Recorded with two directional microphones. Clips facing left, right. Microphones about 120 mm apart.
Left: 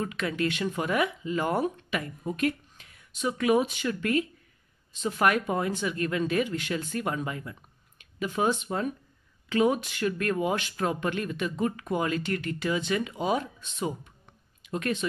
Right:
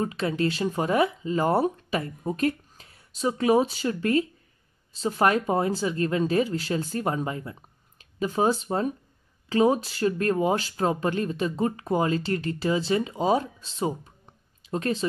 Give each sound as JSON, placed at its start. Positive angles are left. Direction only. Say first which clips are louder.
{"t": 0.0, "sound": "speech", "louder": "right 3 dB", "side_deg": -30}